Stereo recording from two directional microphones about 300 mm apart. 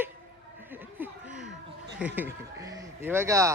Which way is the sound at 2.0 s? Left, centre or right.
Centre.